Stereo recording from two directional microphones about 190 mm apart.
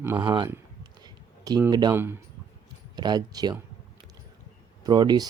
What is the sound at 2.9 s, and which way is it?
Speech, 20° right (ahead or behind).